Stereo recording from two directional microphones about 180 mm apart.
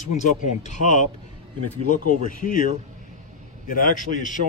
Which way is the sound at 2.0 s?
45° left (ahead or behind).